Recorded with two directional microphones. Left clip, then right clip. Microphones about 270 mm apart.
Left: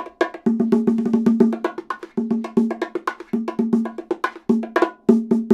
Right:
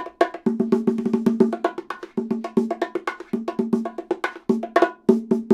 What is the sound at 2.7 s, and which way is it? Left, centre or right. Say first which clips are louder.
Wood block: left 1 dB; centre.